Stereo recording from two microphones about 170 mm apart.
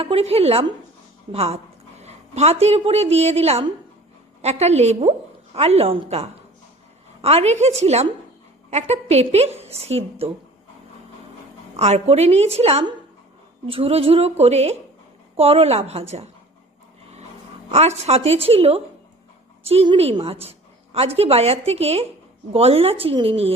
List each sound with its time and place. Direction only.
0.0 s a woman's voice: 35° right (ahead or behind)
11.8 s a woman's voice: 40° right (ahead or behind)
17.7 s a woman's voice: 40° right (ahead or behind)